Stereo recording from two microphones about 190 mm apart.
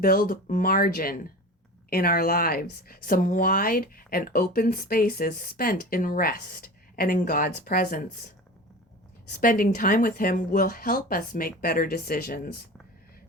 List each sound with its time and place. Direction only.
0.0 s a woman's voice: 50° left (ahead or behind)
9.4 s a woman's voice: 45° left (ahead or behind)